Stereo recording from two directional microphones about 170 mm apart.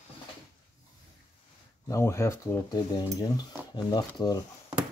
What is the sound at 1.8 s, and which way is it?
Speech, 15° left (ahead or behind).